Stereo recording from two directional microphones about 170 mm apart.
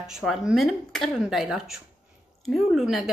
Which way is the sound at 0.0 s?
Centre (ahead or behind).